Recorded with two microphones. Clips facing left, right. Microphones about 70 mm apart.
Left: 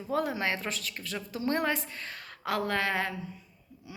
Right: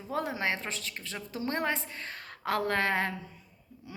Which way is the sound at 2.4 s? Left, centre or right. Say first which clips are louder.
Right 1 dB; right.